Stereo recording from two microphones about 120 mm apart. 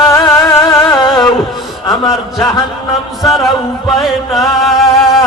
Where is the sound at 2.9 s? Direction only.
Centre (ahead or behind).